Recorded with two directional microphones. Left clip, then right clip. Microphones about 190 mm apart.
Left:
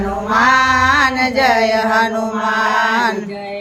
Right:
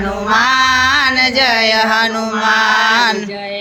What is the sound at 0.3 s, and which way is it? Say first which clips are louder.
Female singing: even; 15° right (ahead or behind).